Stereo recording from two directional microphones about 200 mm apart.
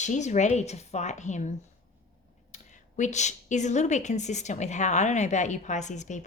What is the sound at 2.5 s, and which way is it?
A woman's voice, 35° left (ahead or behind).